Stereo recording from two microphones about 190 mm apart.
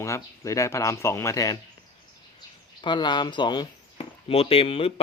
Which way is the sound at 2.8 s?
25° left (ahead or behind).